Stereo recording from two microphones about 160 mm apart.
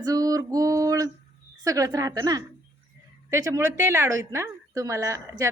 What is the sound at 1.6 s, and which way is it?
Speech, 20° right (ahead or behind).